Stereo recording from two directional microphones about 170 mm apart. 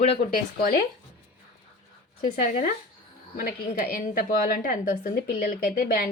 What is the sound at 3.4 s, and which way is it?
A woman's voice, 60° left (ahead or behind).